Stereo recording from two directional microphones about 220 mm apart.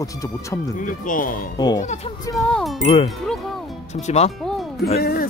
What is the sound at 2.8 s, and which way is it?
Speech, 30° left (ahead or behind).